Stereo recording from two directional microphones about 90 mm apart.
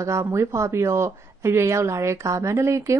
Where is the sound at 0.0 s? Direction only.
35° right (ahead or behind).